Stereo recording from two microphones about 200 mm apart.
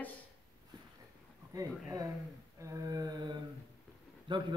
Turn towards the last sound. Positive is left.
turn(degrees=-25)  # may be behind; listen again after turning